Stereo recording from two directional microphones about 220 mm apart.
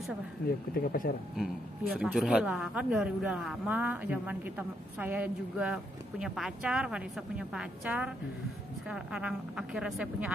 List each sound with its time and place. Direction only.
0.5 s speech: 45° left (ahead or behind)
2.0 s a woman's voice: centre (ahead or behind)